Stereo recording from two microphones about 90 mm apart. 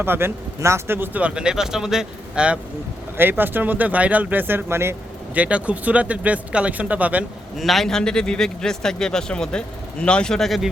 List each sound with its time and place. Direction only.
0.0 s speech: 25° right (ahead or behind)
3.2 s speech: 20° right (ahead or behind)
5.3 s speech: 15° right (ahead or behind)
7.5 s a man's voice: centre (ahead or behind)